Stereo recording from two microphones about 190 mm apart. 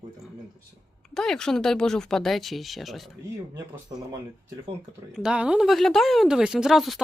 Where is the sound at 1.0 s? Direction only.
5° left (ahead or behind).